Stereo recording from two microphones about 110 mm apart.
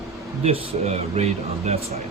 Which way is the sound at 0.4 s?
65° right (ahead or behind).